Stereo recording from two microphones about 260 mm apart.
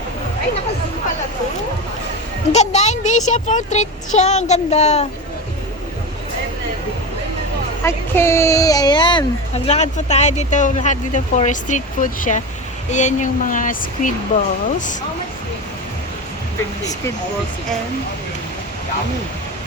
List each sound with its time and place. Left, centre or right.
2.5 s speech: left
7.9 s speech: centre; by 14.9 s left